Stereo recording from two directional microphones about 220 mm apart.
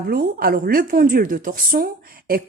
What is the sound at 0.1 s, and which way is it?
A woman's voice, 45° right (ahead or behind).